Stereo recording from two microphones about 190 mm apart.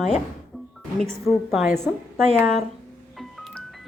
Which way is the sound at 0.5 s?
Centre (ahead or behind).